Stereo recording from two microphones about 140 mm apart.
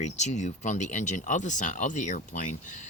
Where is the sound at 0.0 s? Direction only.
60° left (ahead or behind).